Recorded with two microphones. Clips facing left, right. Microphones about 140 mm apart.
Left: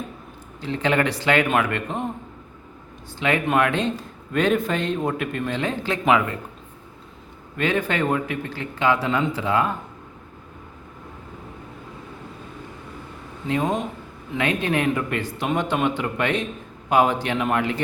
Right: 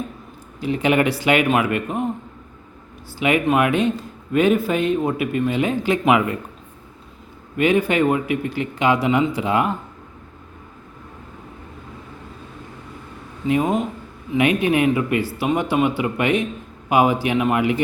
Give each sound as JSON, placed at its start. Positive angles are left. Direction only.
{"t": 0.6, "sound": "a man's voice", "side_deg": -15}
{"t": 3.2, "sound": "a man's voice", "side_deg": -10}
{"t": 7.5, "sound": "a man's voice", "side_deg": -10}
{"t": 13.5, "sound": "a man's voice", "side_deg": -10}